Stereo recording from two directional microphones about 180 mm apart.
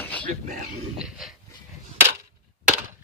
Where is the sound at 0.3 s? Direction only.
40° right (ahead or behind).